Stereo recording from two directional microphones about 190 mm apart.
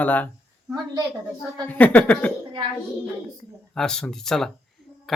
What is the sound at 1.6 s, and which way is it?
Speech, 10° left (ahead or behind).